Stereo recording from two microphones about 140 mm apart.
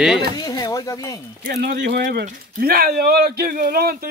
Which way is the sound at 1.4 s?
85° right.